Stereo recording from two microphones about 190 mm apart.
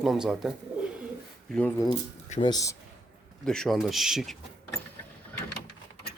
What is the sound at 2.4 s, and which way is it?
Speech, 20° left (ahead or behind).